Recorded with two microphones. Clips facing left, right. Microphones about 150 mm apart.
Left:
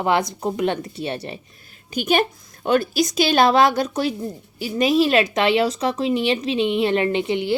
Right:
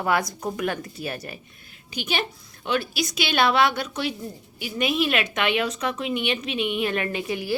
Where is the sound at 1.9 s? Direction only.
50° left (ahead or behind); by 7.5 s 25° left (ahead or behind).